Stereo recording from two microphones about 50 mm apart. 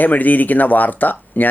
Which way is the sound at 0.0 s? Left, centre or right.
Left.